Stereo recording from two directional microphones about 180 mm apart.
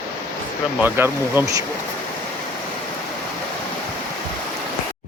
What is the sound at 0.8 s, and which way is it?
Speech, 15° right (ahead or behind).